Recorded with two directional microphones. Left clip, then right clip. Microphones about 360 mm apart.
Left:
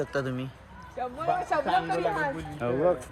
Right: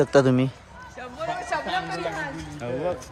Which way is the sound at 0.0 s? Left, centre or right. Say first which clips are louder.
Right 12 dB; centre.